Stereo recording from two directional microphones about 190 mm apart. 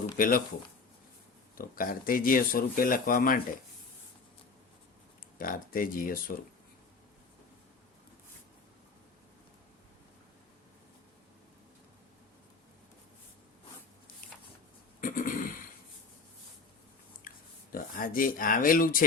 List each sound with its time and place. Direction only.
0.2 s speech: 45° left (ahead or behind)
1.5 s speech: 50° left (ahead or behind)
5.4 s speech: 45° left (ahead or behind)
15.0 s a sound: 45° left (ahead or behind)
17.2 s speech: 50° left (ahead or behind)